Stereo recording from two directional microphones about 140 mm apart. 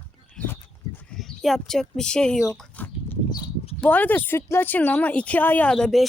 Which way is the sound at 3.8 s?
10° left (ahead or behind).